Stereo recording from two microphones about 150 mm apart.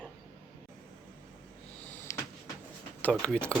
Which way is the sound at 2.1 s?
20° left (ahead or behind).